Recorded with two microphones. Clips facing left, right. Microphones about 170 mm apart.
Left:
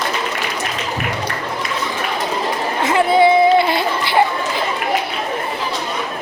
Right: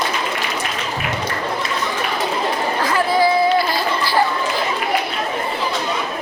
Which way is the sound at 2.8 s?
25° left (ahead or behind).